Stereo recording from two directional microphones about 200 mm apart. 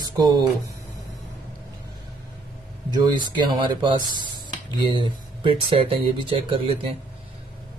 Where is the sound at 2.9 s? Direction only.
20° right (ahead or behind).